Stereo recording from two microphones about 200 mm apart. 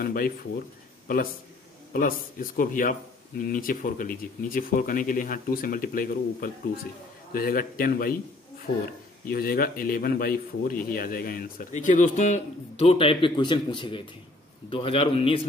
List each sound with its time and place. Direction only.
0.0 s a man's voice: 45° left (ahead or behind)
1.9 s a man's voice: 45° left (ahead or behind)
9.3 s a man's voice: 50° left (ahead or behind); by 15.4 s 30° left (ahead or behind)